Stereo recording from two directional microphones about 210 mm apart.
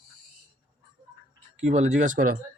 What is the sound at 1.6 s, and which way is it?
Speech, 35° right (ahead or behind).